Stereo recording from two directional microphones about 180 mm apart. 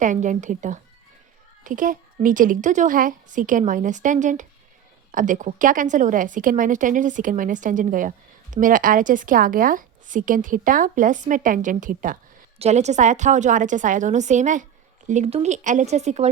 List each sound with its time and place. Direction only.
0.0 s a woman's voice: 45° right (ahead or behind)
12.5 s a woman's voice: 40° right (ahead or behind)